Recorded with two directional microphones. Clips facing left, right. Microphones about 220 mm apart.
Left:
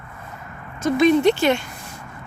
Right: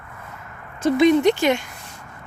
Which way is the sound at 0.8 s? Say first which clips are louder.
Even; 20° right (ahead or behind).